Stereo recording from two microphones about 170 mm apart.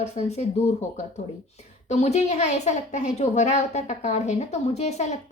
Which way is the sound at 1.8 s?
40° left (ahead or behind).